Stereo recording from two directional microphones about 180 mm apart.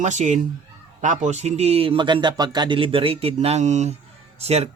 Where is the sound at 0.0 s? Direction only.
40° right (ahead or behind).